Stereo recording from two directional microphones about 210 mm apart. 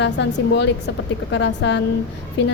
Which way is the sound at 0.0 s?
55° left (ahead or behind).